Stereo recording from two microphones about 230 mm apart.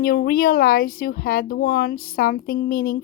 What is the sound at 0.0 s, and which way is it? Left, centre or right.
A woman's voice, left.